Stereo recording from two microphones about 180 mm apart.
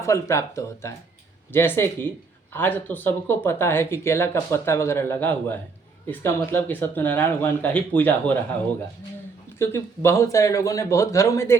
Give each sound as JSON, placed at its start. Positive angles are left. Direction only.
{"t": 0.0, "sound": "speech", "side_deg": 15}
{"t": 9.6, "sound": "speech", "side_deg": 15}